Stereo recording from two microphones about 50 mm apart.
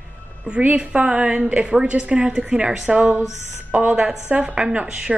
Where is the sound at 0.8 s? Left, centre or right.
Right.